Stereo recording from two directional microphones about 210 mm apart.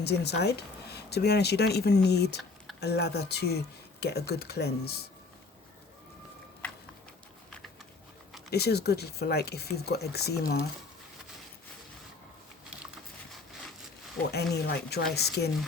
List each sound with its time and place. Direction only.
0.0 s speech: 50° left (ahead or behind)
6.6 s a sound: 5° left (ahead or behind)
8.4 s speech: 50° left (ahead or behind)
14.2 s speech: 50° left (ahead or behind)